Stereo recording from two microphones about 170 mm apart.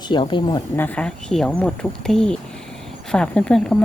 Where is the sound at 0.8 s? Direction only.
10° left (ahead or behind).